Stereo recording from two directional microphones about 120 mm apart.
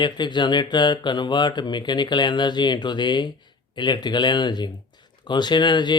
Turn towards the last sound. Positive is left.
turn(degrees=40)  # may be behind; listen again after turning